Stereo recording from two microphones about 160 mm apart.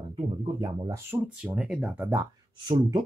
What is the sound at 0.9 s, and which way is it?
Speech, 10° right (ahead or behind).